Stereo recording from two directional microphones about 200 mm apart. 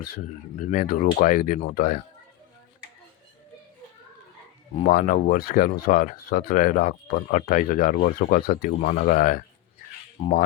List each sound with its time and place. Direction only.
0.7 s speech: 45° left (ahead or behind)
4.9 s speech: 45° left (ahead or behind)
10.2 s speech: 30° left (ahead or behind)